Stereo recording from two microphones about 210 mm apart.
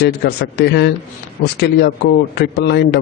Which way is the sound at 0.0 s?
50° left (ahead or behind).